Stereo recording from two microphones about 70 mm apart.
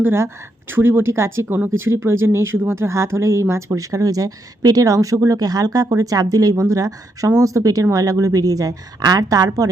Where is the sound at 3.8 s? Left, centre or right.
Right.